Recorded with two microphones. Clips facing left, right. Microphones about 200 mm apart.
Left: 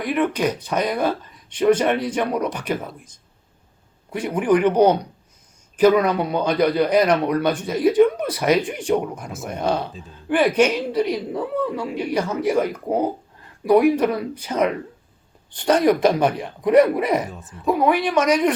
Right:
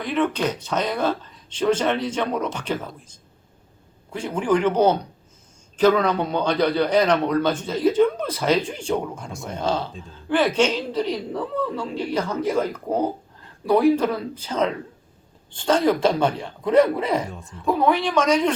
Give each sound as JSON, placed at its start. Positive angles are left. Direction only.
{"t": 0.0, "sound": "speech", "side_deg": 10}
{"t": 4.1, "sound": "speech", "side_deg": 15}
{"t": 17.2, "sound": "a woman's voice", "side_deg": 0}